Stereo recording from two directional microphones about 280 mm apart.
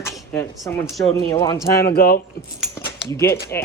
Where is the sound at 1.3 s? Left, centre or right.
Centre.